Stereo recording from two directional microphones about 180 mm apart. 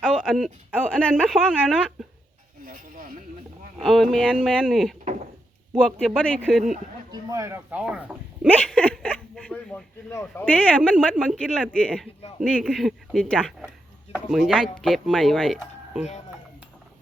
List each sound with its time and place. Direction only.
0.0 s speech: 5° left (ahead or behind)
2.6 s a sound: 50° right (ahead or behind)
3.8 s speech: centre (ahead or behind)
7.1 s speech: 20° right (ahead or behind)
8.4 s speech: 5° left (ahead or behind)